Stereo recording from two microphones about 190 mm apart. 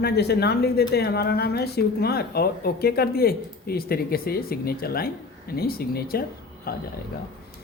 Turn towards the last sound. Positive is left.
turn(degrees=50)  # may be behind; listen again after turning